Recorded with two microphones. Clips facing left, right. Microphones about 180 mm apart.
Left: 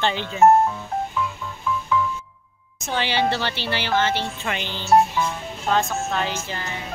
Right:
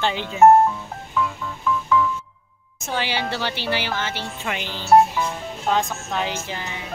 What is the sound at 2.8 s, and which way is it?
Speech, 5° right (ahead or behind).